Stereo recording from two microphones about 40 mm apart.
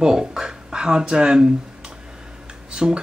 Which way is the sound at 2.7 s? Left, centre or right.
Centre.